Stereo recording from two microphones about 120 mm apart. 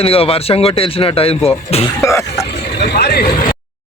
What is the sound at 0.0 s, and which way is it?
Speech, 50° left (ahead or behind).